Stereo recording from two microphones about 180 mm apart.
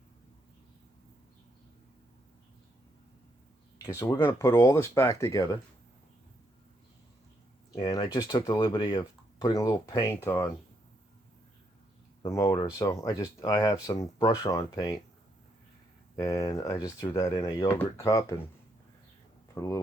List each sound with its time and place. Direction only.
3.8 s speech: 20° left (ahead or behind)
7.7 s speech: 20° left (ahead or behind)
12.2 s speech: 15° left (ahead or behind)
16.1 s speech: 20° left (ahead or behind)
19.5 s speech: 20° left (ahead or behind)